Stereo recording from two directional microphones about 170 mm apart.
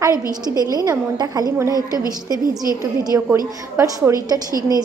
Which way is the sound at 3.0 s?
20° right (ahead or behind).